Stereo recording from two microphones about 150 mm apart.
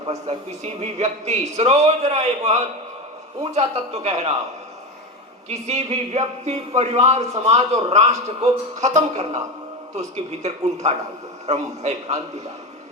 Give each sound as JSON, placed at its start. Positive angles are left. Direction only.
{"t": 0.3, "sound": "speech", "side_deg": -45}
{"t": 5.5, "sound": "speech", "side_deg": -45}
{"t": 10.4, "sound": "speech", "side_deg": -45}